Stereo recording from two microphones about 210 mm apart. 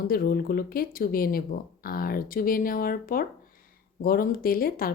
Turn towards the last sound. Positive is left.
turn(degrees=45)  # may be behind; listen again after turning